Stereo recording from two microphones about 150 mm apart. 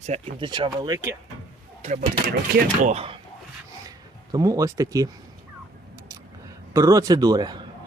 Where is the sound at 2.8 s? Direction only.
40° right (ahead or behind).